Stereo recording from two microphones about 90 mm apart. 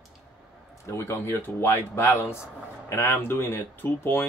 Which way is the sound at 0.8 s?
30° left (ahead or behind).